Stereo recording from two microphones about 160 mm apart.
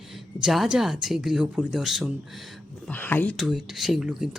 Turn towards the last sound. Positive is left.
turn(degrees=-5)  # may be behind; listen again after turning